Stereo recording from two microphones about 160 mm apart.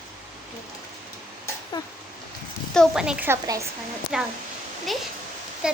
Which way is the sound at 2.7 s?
Centre (ahead or behind).